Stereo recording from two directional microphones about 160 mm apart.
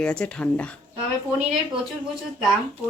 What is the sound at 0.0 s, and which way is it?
Speech, 5° left (ahead or behind).